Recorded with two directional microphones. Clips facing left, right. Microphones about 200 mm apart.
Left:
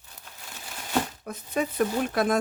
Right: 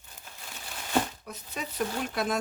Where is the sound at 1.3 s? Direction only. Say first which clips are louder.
Left 10 dB; 55° left (ahead or behind).